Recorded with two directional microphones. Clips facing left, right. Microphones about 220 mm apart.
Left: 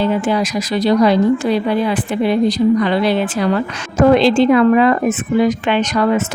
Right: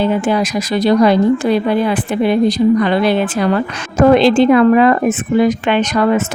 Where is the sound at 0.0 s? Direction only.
50° right (ahead or behind).